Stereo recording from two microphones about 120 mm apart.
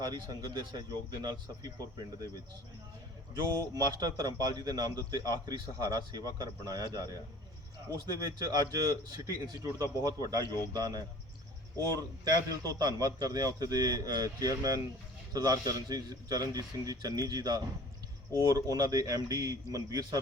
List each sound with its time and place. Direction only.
0.0 s a man's voice: 35° right (ahead or behind)
3.6 s a man's voice: 35° right (ahead or behind)